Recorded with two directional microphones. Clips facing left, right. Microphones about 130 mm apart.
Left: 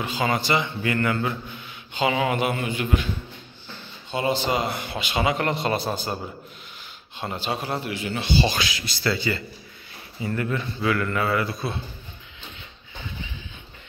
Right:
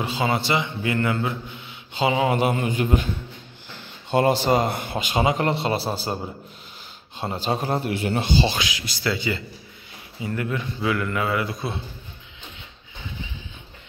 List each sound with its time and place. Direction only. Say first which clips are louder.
0.2 s a man's voice: even; 25° right (ahead or behind); by 3.1 s 40° right (ahead or behind)
4.1 s a man's voice: right 5 dB; 50° right (ahead or behind)
5.2 s a man's voice: right 1 dB; 30° right (ahead or behind)
7.2 s a man's voice: right 3 dB; 35° right (ahead or behind)
8.5 s speech: even; 15° right (ahead or behind)